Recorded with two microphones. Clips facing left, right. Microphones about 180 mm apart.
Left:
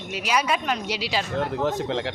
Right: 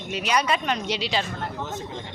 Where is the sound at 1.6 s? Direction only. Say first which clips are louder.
Left 9 dB; 85° left.